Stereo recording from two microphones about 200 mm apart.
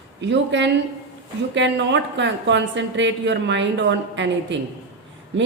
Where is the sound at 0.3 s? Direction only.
65° right (ahead or behind).